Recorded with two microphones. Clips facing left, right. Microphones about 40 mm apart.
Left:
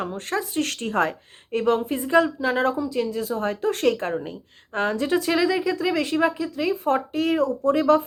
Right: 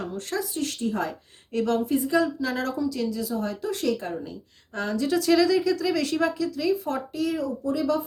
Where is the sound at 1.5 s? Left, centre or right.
Left.